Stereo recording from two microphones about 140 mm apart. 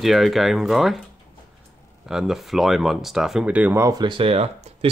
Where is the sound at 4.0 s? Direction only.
35° right (ahead or behind).